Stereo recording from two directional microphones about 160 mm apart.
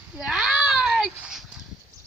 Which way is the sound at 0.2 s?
Centre (ahead or behind).